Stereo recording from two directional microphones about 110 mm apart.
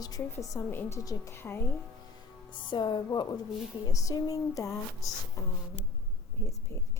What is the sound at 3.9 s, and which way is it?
Speech, 30° left (ahead or behind).